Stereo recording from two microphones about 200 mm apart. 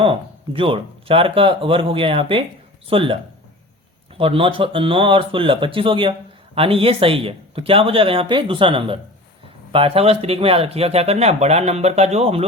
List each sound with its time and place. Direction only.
0.0 s speech: 25° right (ahead or behind)
4.2 s speech: 25° right (ahead or behind)